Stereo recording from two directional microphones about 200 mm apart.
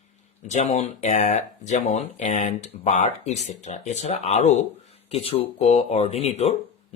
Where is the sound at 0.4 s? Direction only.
35° left (ahead or behind).